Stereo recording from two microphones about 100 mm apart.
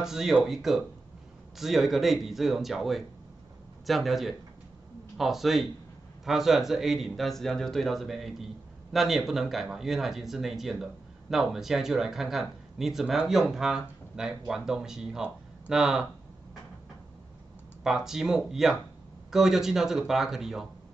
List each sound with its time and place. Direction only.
0.0 s speech: 5° right (ahead or behind)
17.8 s speech: 5° right (ahead or behind)